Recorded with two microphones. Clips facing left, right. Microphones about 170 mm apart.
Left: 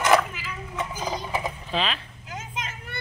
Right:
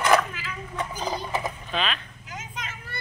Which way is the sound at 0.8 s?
10° left (ahead or behind).